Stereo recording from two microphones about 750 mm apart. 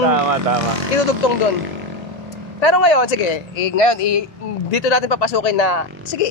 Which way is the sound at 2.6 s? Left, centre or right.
Left.